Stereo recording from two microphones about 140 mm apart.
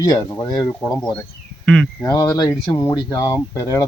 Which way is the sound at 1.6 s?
Centre (ahead or behind).